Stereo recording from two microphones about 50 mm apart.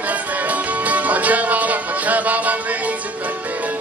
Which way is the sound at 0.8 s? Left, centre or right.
Right.